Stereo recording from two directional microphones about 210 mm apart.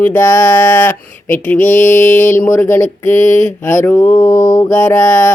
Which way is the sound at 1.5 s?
35° left (ahead or behind).